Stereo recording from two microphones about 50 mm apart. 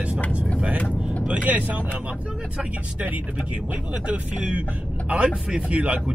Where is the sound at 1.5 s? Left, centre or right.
Right.